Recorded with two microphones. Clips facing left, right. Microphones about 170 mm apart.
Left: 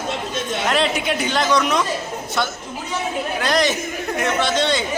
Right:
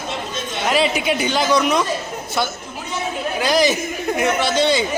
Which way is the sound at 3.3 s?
5° right (ahead or behind).